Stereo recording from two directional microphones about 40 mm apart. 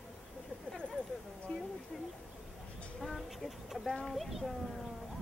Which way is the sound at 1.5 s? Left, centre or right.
Left.